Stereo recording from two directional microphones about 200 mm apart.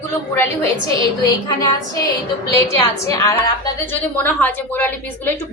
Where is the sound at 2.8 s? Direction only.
15° left (ahead or behind).